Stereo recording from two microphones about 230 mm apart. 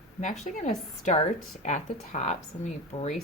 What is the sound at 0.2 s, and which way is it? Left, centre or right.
A woman's voice, left.